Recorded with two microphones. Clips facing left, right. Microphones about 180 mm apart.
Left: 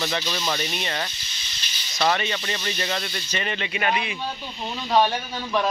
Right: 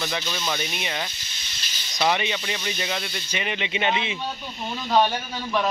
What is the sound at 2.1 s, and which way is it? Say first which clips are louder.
Speech: even; 15° right (ahead or behind).